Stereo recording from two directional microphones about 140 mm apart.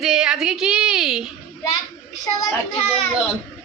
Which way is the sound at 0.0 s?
5° right (ahead or behind).